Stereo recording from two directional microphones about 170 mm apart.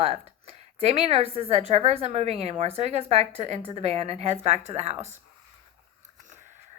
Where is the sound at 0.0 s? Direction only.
35° right (ahead or behind).